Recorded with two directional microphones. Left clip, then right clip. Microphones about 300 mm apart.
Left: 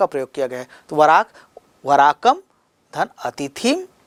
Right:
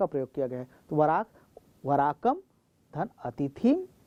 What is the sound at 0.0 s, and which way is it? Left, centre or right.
Speech, centre.